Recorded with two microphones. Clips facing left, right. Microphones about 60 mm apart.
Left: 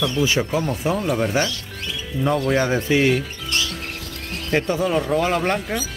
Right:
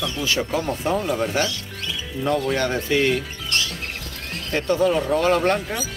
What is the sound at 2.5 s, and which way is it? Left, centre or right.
Speech, centre.